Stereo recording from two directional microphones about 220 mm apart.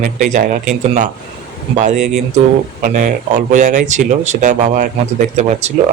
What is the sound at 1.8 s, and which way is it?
Speech, 35° right (ahead or behind).